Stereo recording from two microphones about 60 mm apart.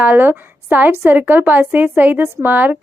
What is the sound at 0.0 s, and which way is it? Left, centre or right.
A woman's voice, right.